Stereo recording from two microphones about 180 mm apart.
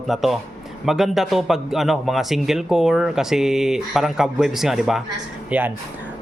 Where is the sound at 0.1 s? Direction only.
Centre (ahead or behind).